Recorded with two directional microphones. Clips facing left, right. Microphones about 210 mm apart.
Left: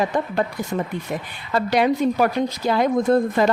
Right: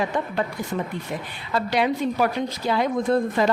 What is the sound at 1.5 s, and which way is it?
A woman's voice, 50° left (ahead or behind).